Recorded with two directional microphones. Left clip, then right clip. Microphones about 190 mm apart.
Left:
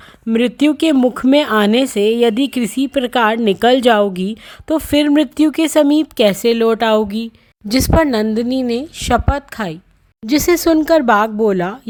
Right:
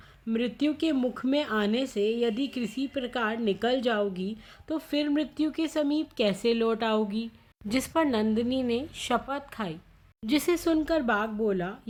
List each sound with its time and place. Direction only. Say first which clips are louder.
0.3 s speech: left 14 dB; 50° left (ahead or behind)